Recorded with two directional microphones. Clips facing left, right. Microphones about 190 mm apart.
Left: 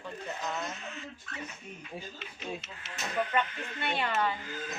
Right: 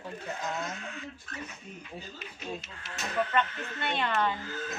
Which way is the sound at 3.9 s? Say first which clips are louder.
Right 1 dB; 10° left (ahead or behind).